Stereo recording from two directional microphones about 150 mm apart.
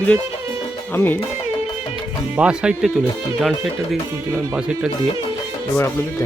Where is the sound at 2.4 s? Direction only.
5° right (ahead or behind).